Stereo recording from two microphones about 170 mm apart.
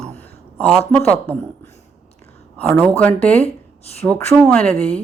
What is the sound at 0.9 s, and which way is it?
Speech, 15° left (ahead or behind).